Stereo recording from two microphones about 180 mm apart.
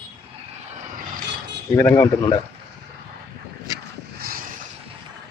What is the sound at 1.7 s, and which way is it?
Speech, 15° left (ahead or behind).